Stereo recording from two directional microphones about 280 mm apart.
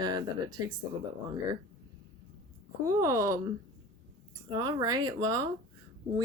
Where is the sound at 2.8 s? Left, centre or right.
Centre.